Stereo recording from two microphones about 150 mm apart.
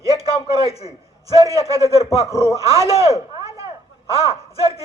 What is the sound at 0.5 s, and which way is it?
Speech, 40° left (ahead or behind).